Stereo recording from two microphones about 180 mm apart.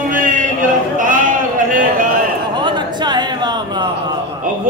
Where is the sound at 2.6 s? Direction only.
25° right (ahead or behind).